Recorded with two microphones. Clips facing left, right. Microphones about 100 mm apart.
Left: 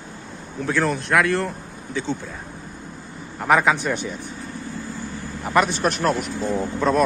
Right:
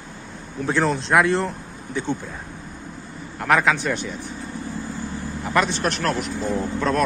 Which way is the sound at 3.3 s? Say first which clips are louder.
Left 1 dB; 5° left (ahead or behind).